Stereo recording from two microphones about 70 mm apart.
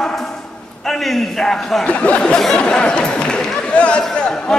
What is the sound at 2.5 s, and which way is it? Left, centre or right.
Chatter, centre.